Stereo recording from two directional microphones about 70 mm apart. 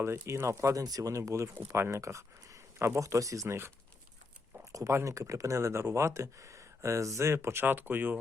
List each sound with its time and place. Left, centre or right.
0.0 s speech: right
4.9 s speech: right